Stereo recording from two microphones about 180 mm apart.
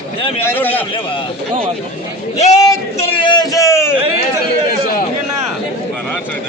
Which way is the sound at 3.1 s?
25° left (ahead or behind).